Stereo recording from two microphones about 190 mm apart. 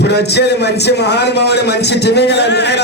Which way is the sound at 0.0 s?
60° left (ahead or behind).